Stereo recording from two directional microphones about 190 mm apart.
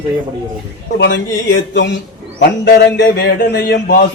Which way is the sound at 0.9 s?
70° left (ahead or behind).